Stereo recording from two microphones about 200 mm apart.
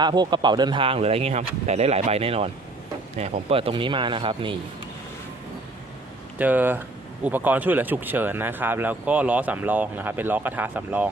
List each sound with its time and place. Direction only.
0.0 s speech: 20° right (ahead or behind)
6.4 s speech: 10° right (ahead or behind)